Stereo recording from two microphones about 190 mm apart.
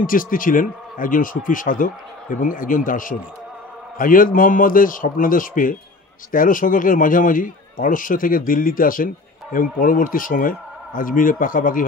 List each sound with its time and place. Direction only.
0.0 s a man's voice: 45° left (ahead or behind)